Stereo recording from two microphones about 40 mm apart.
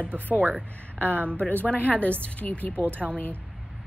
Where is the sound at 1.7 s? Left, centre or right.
Left.